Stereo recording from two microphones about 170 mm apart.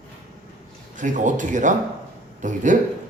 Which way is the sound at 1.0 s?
50° right (ahead or behind).